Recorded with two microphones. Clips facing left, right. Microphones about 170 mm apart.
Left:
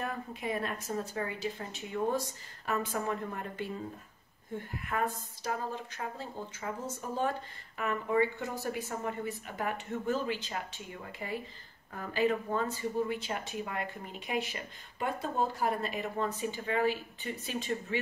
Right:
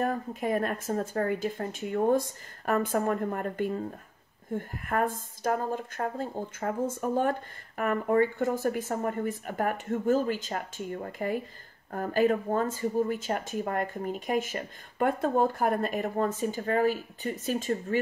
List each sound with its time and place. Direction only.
0.0 s a woman's voice: 45° right (ahead or behind)